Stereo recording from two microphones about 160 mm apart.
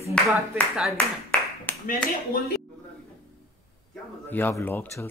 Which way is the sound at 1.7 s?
10° left (ahead or behind).